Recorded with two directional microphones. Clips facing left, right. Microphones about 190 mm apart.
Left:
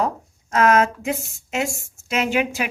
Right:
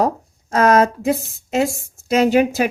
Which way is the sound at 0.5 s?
35° right (ahead or behind).